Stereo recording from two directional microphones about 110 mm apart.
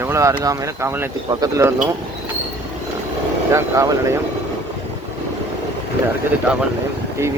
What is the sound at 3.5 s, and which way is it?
Speech, 25° right (ahead or behind).